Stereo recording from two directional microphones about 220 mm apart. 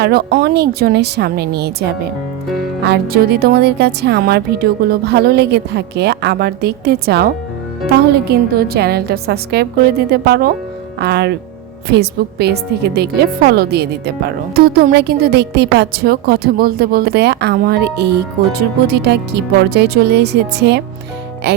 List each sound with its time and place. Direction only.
0.0 s a woman's voice: 45° right (ahead or behind)
21.5 s music: 50° right (ahead or behind)